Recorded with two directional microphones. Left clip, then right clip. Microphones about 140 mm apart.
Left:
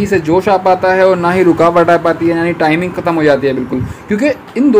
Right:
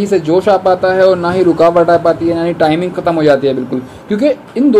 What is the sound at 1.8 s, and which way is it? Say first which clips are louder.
Speech: even; 30° left (ahead or behind).